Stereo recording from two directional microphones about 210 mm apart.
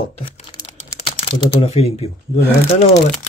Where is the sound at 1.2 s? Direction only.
25° left (ahead or behind).